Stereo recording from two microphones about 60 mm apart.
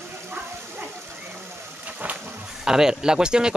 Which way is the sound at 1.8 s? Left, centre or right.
Right.